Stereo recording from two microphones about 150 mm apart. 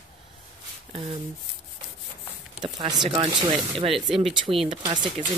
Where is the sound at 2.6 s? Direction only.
30° right (ahead or behind).